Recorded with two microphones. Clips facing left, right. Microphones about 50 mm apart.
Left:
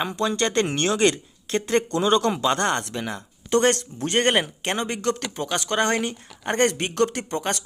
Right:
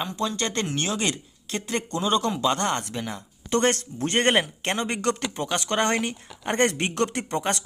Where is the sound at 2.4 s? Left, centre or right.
Centre.